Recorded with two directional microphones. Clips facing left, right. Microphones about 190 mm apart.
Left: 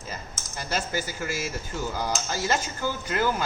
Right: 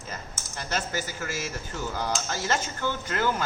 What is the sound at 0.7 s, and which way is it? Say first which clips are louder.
Speech: left 2 dB; 10° left (ahead or behind).